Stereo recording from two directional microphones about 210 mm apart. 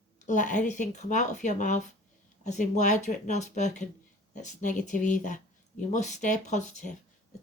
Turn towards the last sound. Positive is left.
turn(degrees=35)  # may be behind; listen again after turning